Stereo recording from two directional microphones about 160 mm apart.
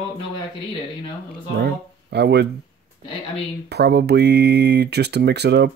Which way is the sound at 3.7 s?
90° right.